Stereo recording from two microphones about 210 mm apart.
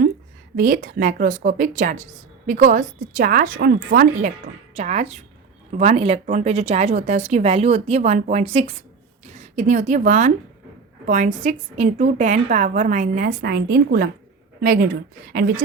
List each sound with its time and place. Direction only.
0.5 s a woman's voice: 40° right (ahead or behind)
4.7 s a woman's voice: 30° right (ahead or behind)